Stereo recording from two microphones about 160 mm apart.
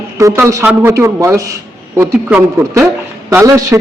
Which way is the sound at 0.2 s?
20° right (ahead or behind).